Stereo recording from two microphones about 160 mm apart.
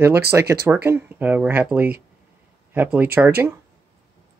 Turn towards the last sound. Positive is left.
turn(degrees=-10)  # may be behind; listen again after turning